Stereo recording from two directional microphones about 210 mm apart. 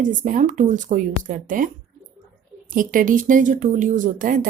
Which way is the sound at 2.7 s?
40° right (ahead or behind).